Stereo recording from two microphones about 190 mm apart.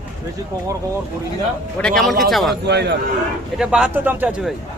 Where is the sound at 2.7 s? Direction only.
60° right (ahead or behind).